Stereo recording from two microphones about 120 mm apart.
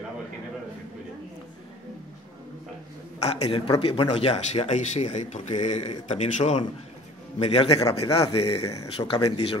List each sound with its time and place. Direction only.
3.2 s speech: 60° left (ahead or behind)
7.3 s a man's voice: 55° left (ahead or behind)